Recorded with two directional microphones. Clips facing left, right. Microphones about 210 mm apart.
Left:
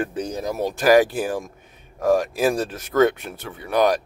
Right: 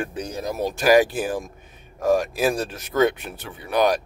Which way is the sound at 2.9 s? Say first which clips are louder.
Left 2 dB; 15° right (ahead or behind).